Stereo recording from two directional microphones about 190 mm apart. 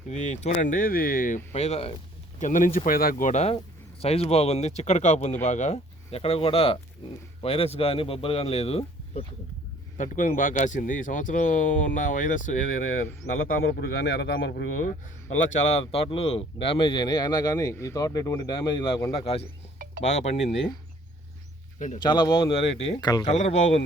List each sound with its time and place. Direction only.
0.1 s speech: 40° left (ahead or behind)
1.5 s speech: 35° left (ahead or behind)
10.0 s a man's voice: 45° left (ahead or behind)
15.5 s speech: 35° left (ahead or behind)
21.8 s speech: 40° left (ahead or behind)
22.0 s speech: 25° left (ahead or behind)
23.3 s speech: 35° left (ahead or behind)